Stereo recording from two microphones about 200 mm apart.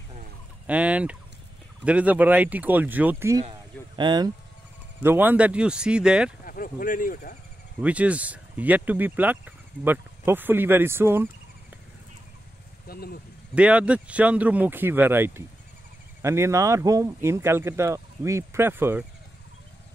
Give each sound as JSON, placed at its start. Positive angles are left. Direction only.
{"t": 0.7, "sound": "speech", "side_deg": -5}
{"t": 5.0, "sound": "speech", "side_deg": -10}
{"t": 6.4, "sound": "speech", "side_deg": 45}
{"t": 7.8, "sound": "speech", "side_deg": -5}
{"t": 12.8, "sound": "speech", "side_deg": 50}
{"t": 13.6, "sound": "speech", "side_deg": -5}